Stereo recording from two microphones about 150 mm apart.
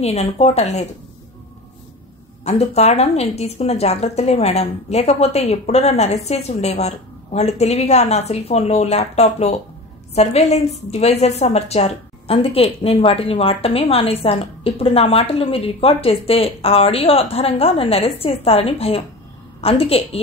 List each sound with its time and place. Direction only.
0.0 s speech: 45° left (ahead or behind)
2.4 s a woman's voice: 45° left (ahead or behind)